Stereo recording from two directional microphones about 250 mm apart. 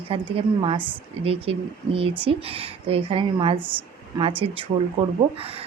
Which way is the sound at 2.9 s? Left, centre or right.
Right.